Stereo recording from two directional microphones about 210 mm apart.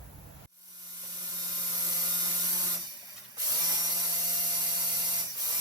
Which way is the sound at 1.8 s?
20° right (ahead or behind).